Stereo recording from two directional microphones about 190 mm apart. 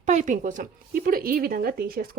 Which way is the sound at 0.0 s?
40° right (ahead or behind).